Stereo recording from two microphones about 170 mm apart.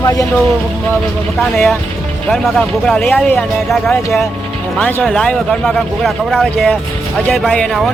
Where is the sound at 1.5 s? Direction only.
5° left (ahead or behind).